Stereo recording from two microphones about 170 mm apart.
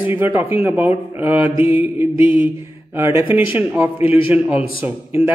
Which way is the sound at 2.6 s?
15° right (ahead or behind).